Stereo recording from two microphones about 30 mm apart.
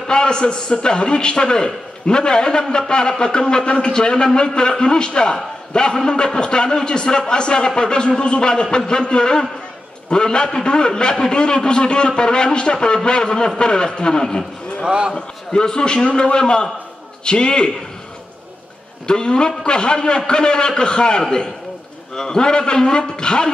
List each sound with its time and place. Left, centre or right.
0.0 s a man's voice: left
14.8 s speech: right
15.1 s a man's voice: left
19.0 s a man's voice: left